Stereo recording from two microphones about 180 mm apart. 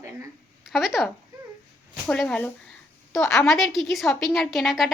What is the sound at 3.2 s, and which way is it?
Speech, 15° left (ahead or behind).